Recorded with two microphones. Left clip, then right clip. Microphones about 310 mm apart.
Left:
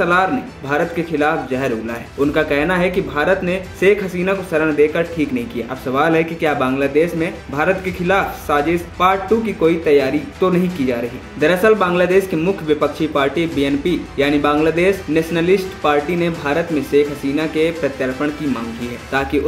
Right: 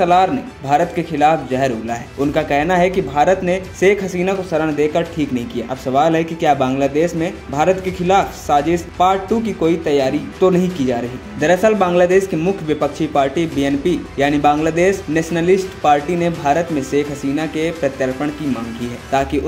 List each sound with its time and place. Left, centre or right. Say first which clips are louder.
0.0 s speech: right 2 dB; right